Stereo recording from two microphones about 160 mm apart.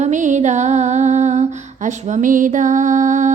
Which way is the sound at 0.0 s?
50° right (ahead or behind).